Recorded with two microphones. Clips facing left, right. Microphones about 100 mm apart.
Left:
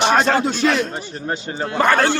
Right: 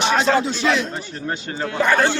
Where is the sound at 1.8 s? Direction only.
55° left (ahead or behind).